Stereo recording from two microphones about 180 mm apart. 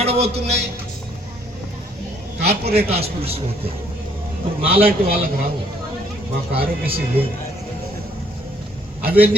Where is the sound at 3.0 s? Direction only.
30° right (ahead or behind).